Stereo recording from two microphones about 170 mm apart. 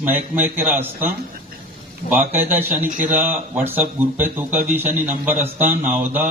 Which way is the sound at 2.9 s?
50° right (ahead or behind).